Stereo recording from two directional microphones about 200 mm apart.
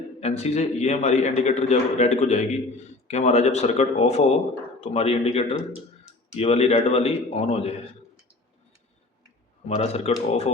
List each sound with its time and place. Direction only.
0.2 s speech: 30° left (ahead or behind)
9.6 s speech: 30° left (ahead or behind)